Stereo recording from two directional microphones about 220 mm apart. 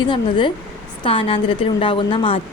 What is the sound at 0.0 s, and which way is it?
A woman's voice, 20° left (ahead or behind).